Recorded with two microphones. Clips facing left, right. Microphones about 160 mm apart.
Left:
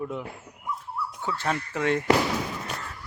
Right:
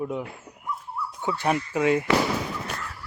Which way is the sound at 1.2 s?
15° right (ahead or behind).